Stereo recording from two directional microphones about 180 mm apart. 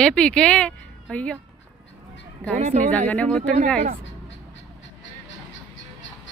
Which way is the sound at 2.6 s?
40° right (ahead or behind).